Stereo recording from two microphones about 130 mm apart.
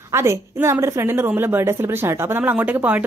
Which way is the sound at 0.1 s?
20° right (ahead or behind).